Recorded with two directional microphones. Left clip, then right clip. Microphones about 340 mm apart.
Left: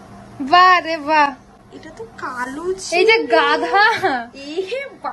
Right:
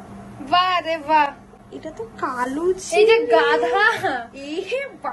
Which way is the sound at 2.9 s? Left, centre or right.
Left.